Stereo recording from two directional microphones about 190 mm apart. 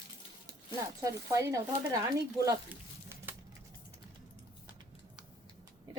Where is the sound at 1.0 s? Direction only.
15° right (ahead or behind).